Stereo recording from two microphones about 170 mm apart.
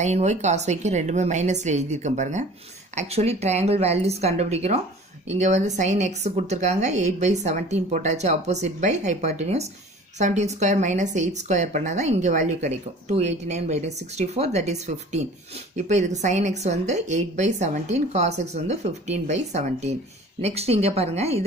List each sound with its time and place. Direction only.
0.0 s a woman's voice: 45° right (ahead or behind)